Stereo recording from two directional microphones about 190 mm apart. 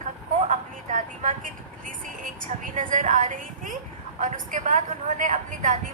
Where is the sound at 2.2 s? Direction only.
45° right (ahead or behind).